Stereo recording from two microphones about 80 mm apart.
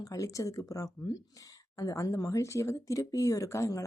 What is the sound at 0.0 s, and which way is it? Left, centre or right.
Speech, left.